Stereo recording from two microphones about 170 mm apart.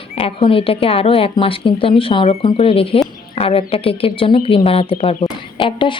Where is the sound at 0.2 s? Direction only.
35° left (ahead or behind).